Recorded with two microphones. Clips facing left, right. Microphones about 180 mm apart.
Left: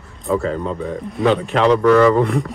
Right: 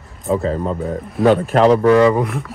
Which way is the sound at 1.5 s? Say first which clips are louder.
Right 2 dB; 40° right (ahead or behind).